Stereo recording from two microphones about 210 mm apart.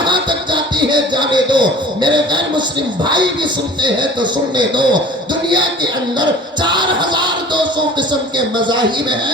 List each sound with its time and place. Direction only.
0.0 s music: 20° right (ahead or behind)
3.0 s a man's voice: 20° right (ahead or behind)
6.1 s music: 20° right (ahead or behind)
8.6 s a man's voice: 20° right (ahead or behind)